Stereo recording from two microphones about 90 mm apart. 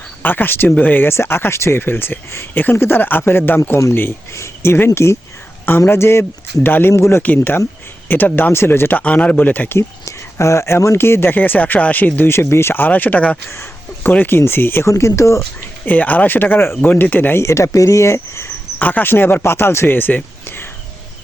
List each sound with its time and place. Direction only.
0.2 s speech: 20° left (ahead or behind)
15.9 s speech: 20° left (ahead or behind)
17.4 s speech: 35° left (ahead or behind)
18.8 s speech: 20° left (ahead or behind)